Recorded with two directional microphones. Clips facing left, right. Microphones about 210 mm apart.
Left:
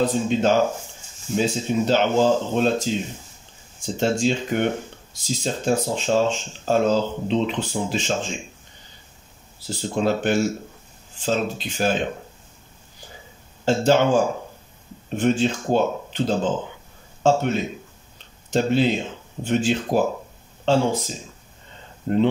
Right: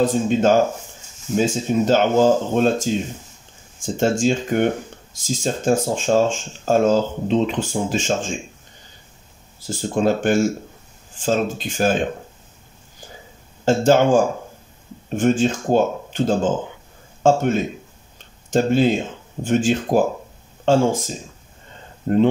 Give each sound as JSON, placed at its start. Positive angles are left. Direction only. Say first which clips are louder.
{"t": 0.0, "sound": "speech", "louder": "right 3 dB", "side_deg": -50}
{"t": 9.7, "sound": "speech", "louder": "right 3 dB", "side_deg": -50}
{"t": 13.7, "sound": "speech", "louder": "right 3 dB", "side_deg": -50}
{"t": 22.1, "sound": "speech", "louder": "right 3 dB", "side_deg": -50}